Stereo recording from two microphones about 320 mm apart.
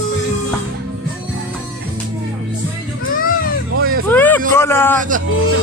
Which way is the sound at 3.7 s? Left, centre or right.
Right.